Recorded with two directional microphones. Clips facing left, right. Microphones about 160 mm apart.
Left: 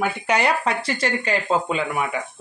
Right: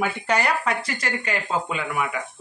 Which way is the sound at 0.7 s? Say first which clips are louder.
Left 3 dB; 30° left (ahead or behind).